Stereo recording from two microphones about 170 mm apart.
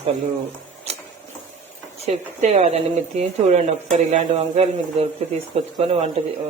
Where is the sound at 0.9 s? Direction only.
40° right (ahead or behind).